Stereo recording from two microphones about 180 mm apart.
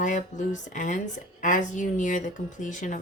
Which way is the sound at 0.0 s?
45° left (ahead or behind).